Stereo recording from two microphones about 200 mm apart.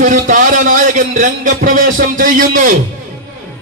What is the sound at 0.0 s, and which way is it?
A man's voice, 40° right (ahead or behind).